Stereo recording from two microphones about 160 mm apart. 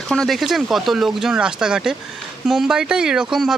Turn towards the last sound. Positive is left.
turn(degrees=-5)  # may be behind; listen again after turning